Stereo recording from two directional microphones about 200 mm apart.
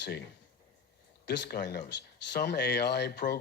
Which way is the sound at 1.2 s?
50° left (ahead or behind).